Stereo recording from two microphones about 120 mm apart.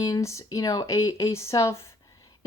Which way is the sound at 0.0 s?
25° left (ahead or behind).